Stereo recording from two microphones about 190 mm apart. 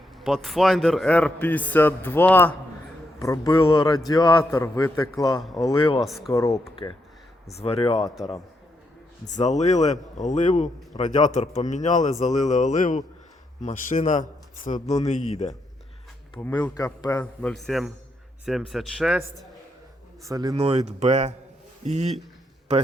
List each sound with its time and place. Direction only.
0.2 s a man's voice: centre (ahead or behind); by 3.5 s 15° left (ahead or behind)
3.5 s a man's voice: 25° left (ahead or behind)
5.4 s a man's voice: centre (ahead or behind)
5.6 s a man's voice: 30° left (ahead or behind)
6.0 s a man's voice: centre (ahead or behind)
6.3 s a man's voice: 15° left (ahead or behind)
7.5 s speech: 30° left (ahead or behind)
9.2 s speech: 40° left (ahead or behind)
16.6 s a man's voice: 20° left (ahead or behind)
17.4 s a man's voice: centre (ahead or behind)
20.2 s speech: 20° right (ahead or behind)
20.6 s speech: 30° right (ahead or behind)